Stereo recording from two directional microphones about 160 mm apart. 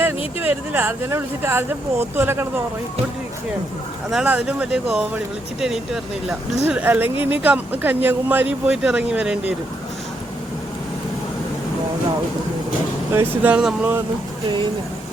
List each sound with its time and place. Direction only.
0.3 s speech: 10° right (ahead or behind)
4.1 s speech: 5° right (ahead or behind)
13.1 s speech: 10° right (ahead or behind)
14.4 s speech: 30° right (ahead or behind)